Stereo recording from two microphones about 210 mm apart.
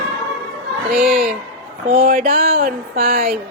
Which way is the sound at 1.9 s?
40° right (ahead or behind).